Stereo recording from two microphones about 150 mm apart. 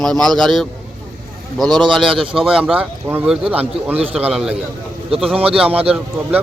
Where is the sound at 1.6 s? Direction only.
30° right (ahead or behind).